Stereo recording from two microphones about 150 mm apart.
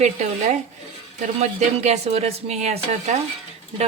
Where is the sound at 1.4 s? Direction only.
50° right (ahead or behind).